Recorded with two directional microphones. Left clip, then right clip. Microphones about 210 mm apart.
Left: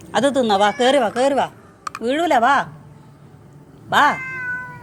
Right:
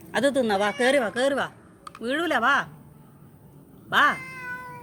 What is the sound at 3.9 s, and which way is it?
Speech, 5° left (ahead or behind).